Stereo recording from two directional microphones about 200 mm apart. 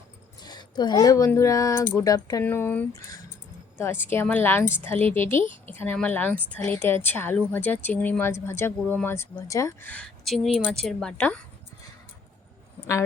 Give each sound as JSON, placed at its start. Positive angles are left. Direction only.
{"t": 0.4, "sound": "a woman's voice", "side_deg": 20}